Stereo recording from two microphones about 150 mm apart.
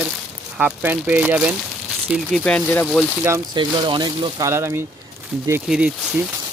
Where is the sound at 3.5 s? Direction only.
30° right (ahead or behind).